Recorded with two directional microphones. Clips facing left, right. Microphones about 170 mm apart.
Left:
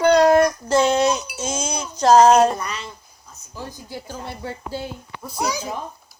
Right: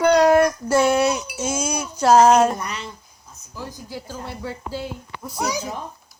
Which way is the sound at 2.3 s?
30° left (ahead or behind).